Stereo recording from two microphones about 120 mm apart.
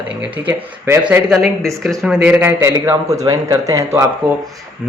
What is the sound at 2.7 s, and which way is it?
A man's voice, 30° right (ahead or behind).